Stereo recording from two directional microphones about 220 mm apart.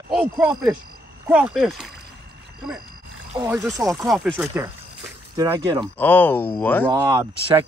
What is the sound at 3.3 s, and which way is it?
Speech, 15° right (ahead or behind).